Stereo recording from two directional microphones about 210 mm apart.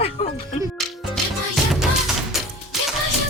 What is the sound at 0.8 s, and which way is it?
Music, centre (ahead or behind).